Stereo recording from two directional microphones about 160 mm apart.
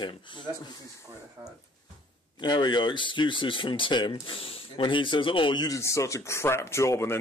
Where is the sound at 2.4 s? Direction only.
30° left (ahead or behind).